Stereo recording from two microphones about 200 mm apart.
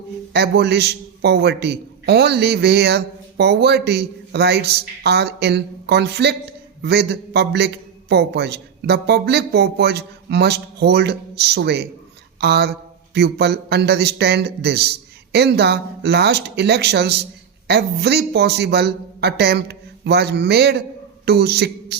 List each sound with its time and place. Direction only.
0.3 s a man's voice: 55° right (ahead or behind)